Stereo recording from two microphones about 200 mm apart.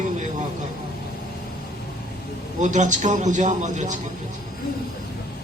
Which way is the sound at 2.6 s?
35° right (ahead or behind).